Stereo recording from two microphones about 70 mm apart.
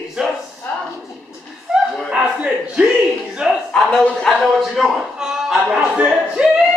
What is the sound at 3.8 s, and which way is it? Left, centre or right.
A man's voice, centre.